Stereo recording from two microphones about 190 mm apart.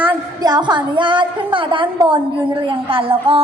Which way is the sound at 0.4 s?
20° right (ahead or behind).